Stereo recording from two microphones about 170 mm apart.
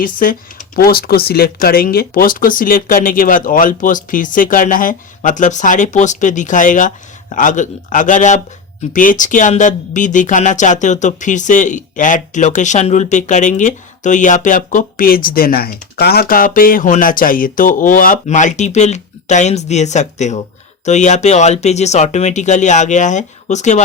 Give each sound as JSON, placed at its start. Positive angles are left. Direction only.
{"t": 0.0, "sound": "speech", "side_deg": 55}